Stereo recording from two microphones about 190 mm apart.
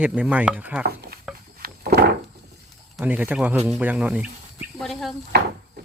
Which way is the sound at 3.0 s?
10° right (ahead or behind).